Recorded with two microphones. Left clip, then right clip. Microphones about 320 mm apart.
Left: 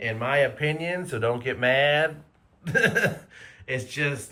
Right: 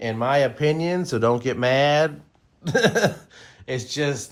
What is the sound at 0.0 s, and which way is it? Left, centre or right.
Speech, centre.